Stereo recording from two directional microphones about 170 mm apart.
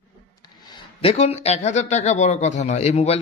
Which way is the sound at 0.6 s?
35° left (ahead or behind).